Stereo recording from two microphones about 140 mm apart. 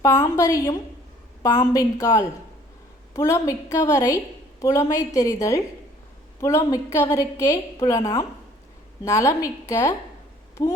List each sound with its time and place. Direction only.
0.0 s a woman's voice: 25° left (ahead or behind)